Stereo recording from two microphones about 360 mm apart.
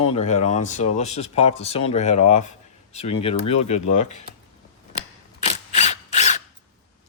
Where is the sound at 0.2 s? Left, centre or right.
Centre.